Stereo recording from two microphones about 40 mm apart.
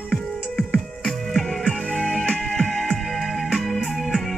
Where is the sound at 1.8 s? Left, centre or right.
Left.